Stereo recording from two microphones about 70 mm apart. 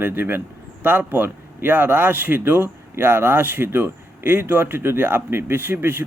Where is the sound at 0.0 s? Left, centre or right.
Right.